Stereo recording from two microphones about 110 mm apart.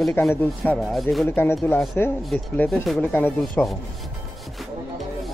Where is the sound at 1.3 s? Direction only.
20° left (ahead or behind).